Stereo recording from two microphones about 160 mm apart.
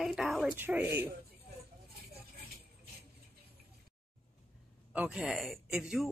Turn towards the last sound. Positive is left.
turn(degrees=-5)  # may be behind; listen again after turning